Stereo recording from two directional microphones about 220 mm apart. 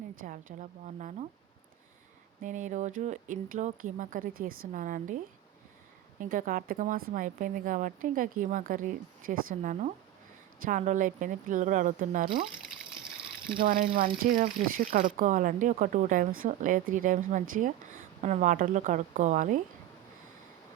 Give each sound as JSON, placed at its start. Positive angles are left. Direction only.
{"t": 0.6, "sound": "speech", "side_deg": -35}
{"t": 2.4, "sound": "speech", "side_deg": -35}
{"t": 13.6, "sound": "speech", "side_deg": -40}